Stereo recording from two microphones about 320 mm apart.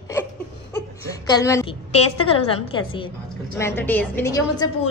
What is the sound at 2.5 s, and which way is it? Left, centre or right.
A woman's voice, centre.